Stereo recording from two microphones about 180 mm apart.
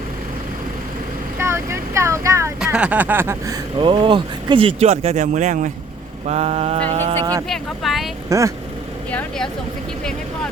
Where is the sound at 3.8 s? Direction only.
30° right (ahead or behind).